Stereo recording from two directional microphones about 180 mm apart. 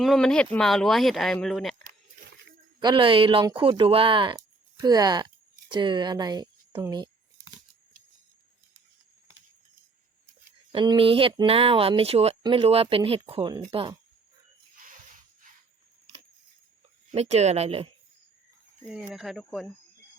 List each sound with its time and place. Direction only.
0.0 s speech: centre (ahead or behind)
2.8 s speech: 25° right (ahead or behind)
6.7 s a sound: 20° right (ahead or behind)
10.7 s speech: 25° right (ahead or behind)
17.2 s speech: 40° right (ahead or behind)
19.1 s speech: centre (ahead or behind)